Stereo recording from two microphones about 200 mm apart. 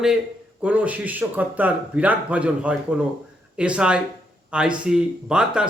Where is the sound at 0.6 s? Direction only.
5° right (ahead or behind).